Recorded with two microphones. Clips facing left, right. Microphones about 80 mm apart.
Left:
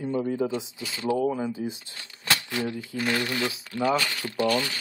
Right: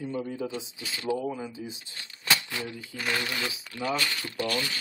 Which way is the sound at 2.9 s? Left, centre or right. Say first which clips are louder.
Left 3 dB; centre.